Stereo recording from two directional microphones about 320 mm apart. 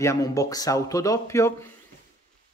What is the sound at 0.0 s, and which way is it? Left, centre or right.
Speech, centre.